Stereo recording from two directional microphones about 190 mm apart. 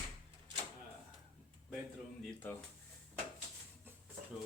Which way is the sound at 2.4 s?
10° left (ahead or behind).